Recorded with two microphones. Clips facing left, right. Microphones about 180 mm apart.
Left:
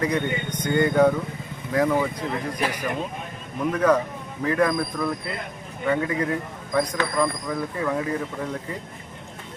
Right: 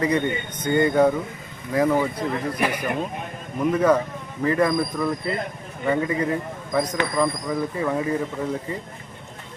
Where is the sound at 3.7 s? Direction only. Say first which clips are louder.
Even; 10° right (ahead or behind).